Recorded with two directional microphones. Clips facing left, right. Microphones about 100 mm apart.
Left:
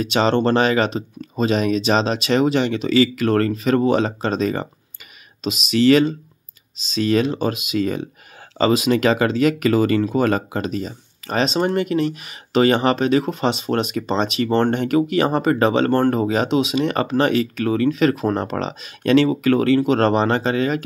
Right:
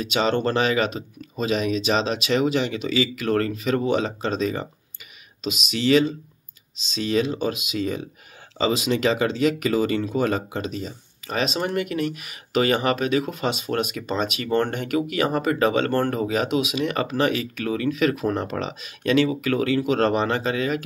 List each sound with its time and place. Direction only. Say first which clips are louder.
0.0 s speech: left 4 dB; 40° left (ahead or behind)
5.7 s speech: left 5 dB; 50° left (ahead or behind)
11.4 s speech: left 5 dB; 30° left (ahead or behind)
15.9 s speech: left 5 dB; 45° left (ahead or behind)
16.2 s speech: left 4 dB; 30° left (ahead or behind)